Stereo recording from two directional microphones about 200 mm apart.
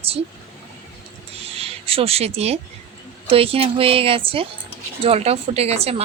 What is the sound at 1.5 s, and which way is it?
A woman's voice, 30° right (ahead or behind).